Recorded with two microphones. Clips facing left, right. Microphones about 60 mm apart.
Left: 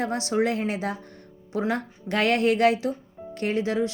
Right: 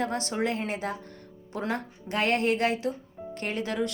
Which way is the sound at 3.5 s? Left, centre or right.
Right.